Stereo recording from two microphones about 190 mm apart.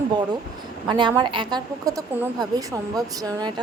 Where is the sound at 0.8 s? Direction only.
25° right (ahead or behind).